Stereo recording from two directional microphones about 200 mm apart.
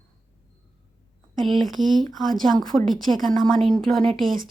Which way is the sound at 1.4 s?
Centre (ahead or behind).